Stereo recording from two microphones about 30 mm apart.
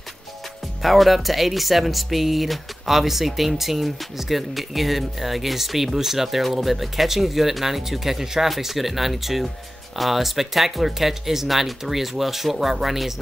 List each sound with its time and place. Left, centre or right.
0.8 s speech: centre